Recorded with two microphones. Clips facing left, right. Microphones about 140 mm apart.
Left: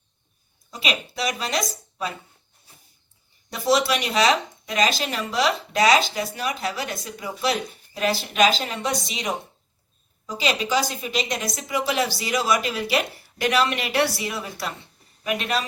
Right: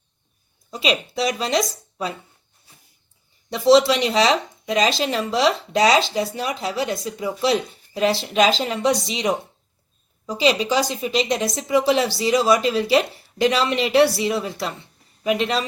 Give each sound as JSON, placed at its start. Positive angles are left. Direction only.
{"t": 0.7, "sound": "a woman's voice", "side_deg": -30}
{"t": 3.5, "sound": "a woman's voice", "side_deg": -25}
{"t": 10.2, "sound": "a woman's voice", "side_deg": -30}